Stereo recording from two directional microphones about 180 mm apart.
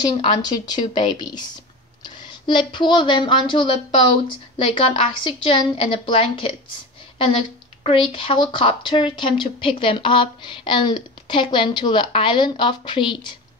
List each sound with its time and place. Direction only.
0.0 s a woman's voice: 25° left (ahead or behind)